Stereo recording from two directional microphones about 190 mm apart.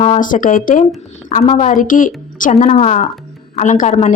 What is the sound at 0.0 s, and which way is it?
A woman's voice, 40° left (ahead or behind).